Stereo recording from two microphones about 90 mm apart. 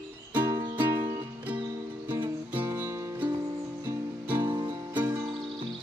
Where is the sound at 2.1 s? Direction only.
25° right (ahead or behind).